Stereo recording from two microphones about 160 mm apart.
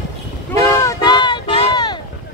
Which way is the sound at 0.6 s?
20° left (ahead or behind).